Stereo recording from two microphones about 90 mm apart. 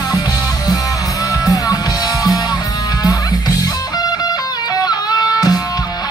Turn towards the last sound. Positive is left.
turn(degrees=45)  # may be behind; listen again after turning